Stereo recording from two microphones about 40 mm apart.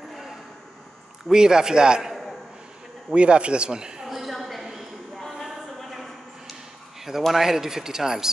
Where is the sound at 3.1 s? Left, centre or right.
Right.